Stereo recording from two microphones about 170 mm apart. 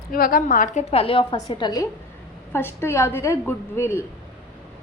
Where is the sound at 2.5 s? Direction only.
15° left (ahead or behind).